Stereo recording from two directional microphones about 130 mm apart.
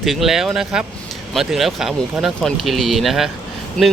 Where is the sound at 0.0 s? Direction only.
Centre (ahead or behind).